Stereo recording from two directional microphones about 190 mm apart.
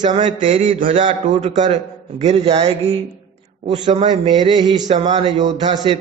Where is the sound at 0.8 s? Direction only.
30° right (ahead or behind).